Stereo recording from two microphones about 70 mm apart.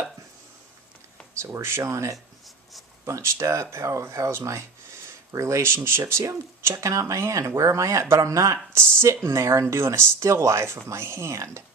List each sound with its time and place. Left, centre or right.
1.4 s speech: right
8.7 s speech: right